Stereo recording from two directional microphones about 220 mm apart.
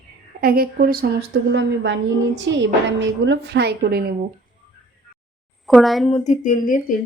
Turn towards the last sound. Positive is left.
turn(degrees=35)  # may be behind; listen again after turning